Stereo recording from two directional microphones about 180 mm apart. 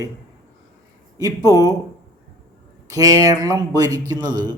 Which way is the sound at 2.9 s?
20° right (ahead or behind).